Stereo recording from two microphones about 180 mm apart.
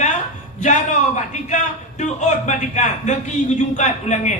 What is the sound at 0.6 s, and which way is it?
A man's voice, 40° left (ahead or behind).